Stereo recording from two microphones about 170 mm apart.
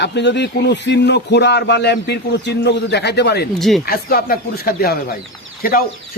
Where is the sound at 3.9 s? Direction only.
60° left (ahead or behind).